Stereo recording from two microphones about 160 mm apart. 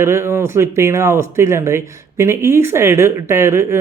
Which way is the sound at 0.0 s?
15° right (ahead or behind).